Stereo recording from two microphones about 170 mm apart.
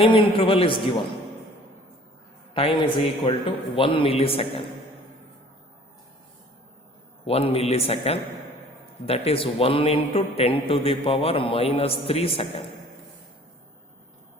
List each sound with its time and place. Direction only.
0.0 s a man's voice: 30° left (ahead or behind)
2.5 s a man's voice: 30° left (ahead or behind)
7.3 s a man's voice: 35° left (ahead or behind)